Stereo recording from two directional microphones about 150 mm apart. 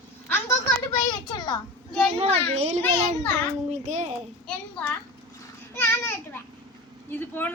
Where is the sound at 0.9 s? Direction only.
30° left (ahead or behind).